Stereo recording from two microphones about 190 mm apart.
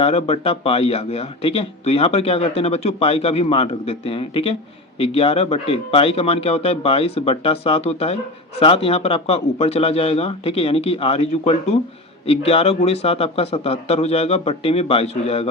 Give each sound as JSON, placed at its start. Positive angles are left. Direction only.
{"t": 0.0, "sound": "speech", "side_deg": 35}